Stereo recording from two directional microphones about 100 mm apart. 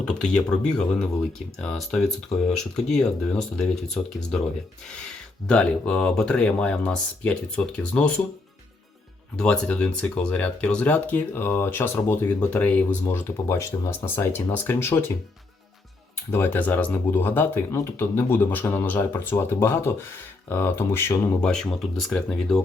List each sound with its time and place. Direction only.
0.0 s speech: 10° left (ahead or behind)
9.3 s speech: 10° left (ahead or behind)
16.3 s speech: 20° left (ahead or behind)
21.4 s speech: 5° left (ahead or behind)